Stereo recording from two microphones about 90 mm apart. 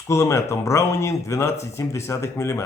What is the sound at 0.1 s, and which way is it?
A man's voice, 30° left (ahead or behind).